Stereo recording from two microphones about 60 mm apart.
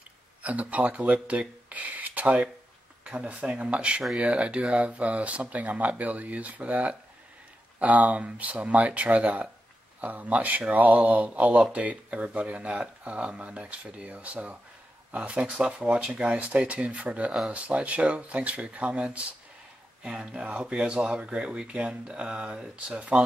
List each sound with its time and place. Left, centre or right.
0.4 s speech: right